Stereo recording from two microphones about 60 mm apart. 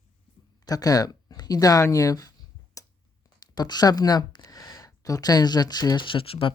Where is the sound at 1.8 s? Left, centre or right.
Left.